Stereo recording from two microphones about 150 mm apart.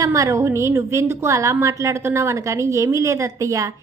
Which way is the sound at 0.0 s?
20° right (ahead or behind).